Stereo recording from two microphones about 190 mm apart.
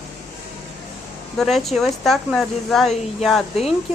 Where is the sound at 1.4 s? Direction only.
Centre (ahead or behind).